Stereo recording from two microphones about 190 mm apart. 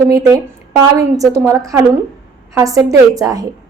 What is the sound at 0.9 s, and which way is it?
A woman's voice, 15° right (ahead or behind).